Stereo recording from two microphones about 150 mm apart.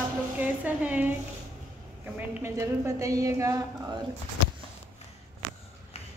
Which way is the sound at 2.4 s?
20° right (ahead or behind).